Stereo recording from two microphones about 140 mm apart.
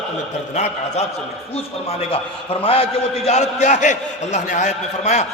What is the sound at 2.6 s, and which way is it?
A man's voice, 45° left (ahead or behind).